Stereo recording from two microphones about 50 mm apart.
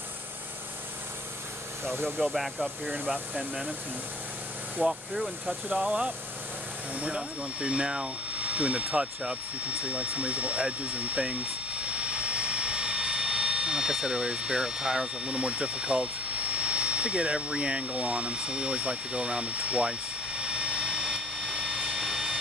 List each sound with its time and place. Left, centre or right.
2.2 s speech: centre
2.9 s speech: centre
4.8 s speech: right
11.9 s vehicle: right